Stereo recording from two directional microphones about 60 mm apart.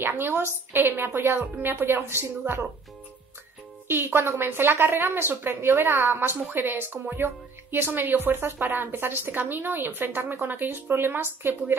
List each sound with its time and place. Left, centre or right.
0.0 s a sound: right
0.7 s a woman's voice: right
3.8 s a woman's voice: right